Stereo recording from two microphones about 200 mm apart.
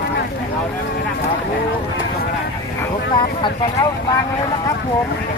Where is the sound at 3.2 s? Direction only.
25° left (ahead or behind).